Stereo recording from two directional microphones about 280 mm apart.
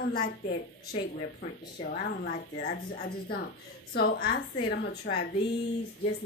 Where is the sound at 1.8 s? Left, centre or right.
Left.